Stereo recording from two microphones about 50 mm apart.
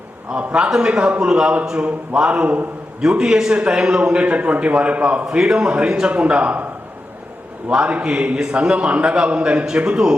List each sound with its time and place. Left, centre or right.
0.3 s a man's voice: right
7.9 s a man's voice: right